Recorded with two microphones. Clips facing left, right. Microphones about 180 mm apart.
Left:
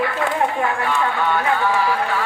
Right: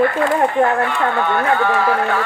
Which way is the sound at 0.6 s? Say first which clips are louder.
Right 3 dB; 55° right (ahead or behind).